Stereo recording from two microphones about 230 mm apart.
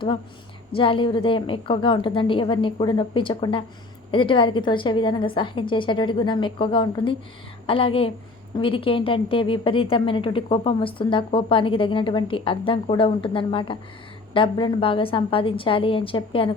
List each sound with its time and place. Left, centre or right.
0.7 s a woman's voice: left